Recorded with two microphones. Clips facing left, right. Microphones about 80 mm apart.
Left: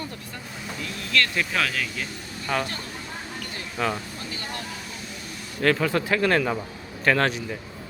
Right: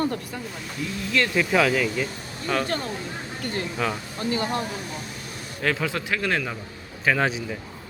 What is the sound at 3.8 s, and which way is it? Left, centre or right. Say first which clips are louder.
Speech: left 2 dB; centre.